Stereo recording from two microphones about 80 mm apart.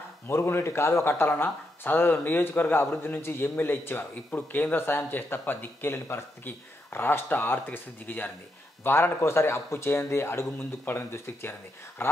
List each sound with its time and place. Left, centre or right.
0.3 s speech: left